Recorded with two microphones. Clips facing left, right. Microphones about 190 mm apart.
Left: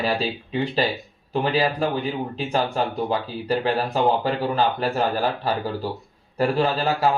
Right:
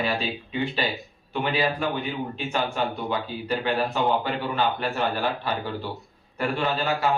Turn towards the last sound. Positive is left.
turn(degrees=35)  # may be behind; listen again after turning